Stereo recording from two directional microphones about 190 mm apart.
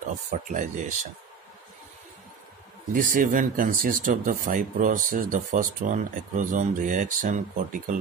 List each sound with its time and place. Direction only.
0.1 s speech: 40° right (ahead or behind)
2.9 s speech: 45° right (ahead or behind)